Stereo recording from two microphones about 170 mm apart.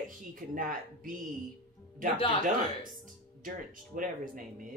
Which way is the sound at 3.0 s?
50° right (ahead or behind).